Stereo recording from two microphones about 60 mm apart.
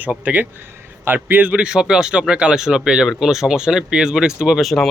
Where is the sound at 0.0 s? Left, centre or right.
Right.